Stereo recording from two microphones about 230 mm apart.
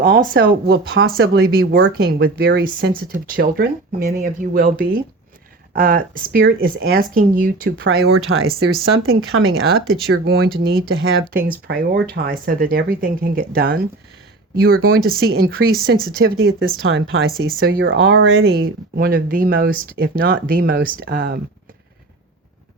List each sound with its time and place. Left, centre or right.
0.0 s speech: right
9.3 s speech: right
10.1 s speech: right